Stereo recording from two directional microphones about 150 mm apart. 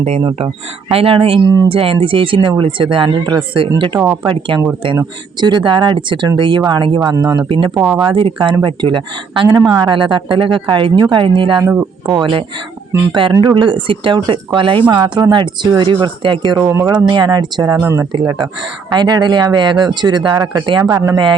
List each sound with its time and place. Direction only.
0.3 s speech: 40° right (ahead or behind)
7.8 s speech: 15° right (ahead or behind)
8.0 s speech: 35° right (ahead or behind)
11.6 s speech: 15° right (ahead or behind)
13.4 s speech: 30° right (ahead or behind)
16.6 s speech: 20° right (ahead or behind)
18.9 s speech: 30° right (ahead or behind)